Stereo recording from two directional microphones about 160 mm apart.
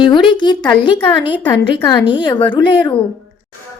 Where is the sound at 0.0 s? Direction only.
30° left (ahead or behind).